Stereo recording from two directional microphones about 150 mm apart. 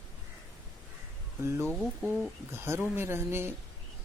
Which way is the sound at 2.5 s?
15° right (ahead or behind).